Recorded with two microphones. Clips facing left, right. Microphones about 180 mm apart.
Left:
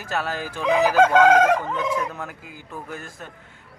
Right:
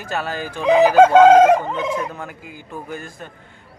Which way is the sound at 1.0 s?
30° right (ahead or behind).